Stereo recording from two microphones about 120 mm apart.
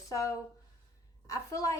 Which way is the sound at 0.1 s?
25° left (ahead or behind).